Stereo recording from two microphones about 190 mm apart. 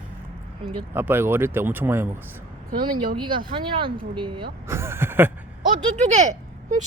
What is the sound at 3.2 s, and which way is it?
Speech, 25° right (ahead or behind).